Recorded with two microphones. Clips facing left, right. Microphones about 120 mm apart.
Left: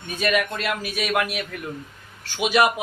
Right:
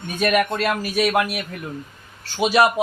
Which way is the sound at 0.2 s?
45° right (ahead or behind).